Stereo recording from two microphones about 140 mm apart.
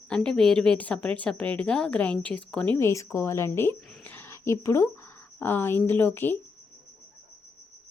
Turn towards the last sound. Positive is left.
turn(degrees=15)  # may be behind; listen again after turning